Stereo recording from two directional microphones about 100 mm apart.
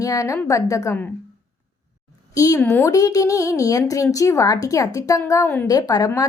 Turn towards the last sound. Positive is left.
turn(degrees=35)  # may be behind; listen again after turning